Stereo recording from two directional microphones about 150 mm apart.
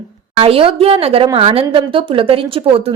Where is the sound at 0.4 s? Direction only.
40° right (ahead or behind).